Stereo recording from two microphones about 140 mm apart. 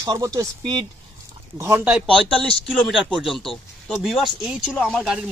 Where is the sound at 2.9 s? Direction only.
Centre (ahead or behind).